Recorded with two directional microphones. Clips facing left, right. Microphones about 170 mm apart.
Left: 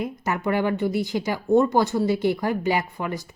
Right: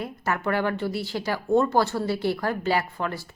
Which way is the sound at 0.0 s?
15° left (ahead or behind).